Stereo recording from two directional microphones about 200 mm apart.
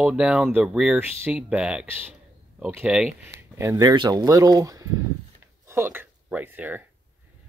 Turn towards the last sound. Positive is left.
turn(degrees=-10)  # may be behind; listen again after turning